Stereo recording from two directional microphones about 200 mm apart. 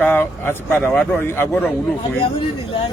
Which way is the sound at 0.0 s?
10° left (ahead or behind).